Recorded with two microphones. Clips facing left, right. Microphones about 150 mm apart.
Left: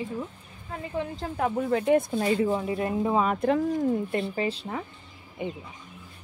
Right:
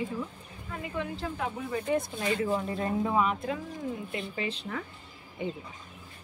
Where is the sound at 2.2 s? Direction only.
30° left (ahead or behind).